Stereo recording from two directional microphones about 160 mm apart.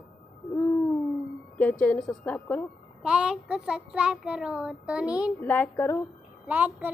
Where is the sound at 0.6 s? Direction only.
20° left (ahead or behind).